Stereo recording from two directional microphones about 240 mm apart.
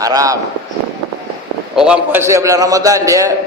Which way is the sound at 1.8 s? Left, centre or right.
Centre.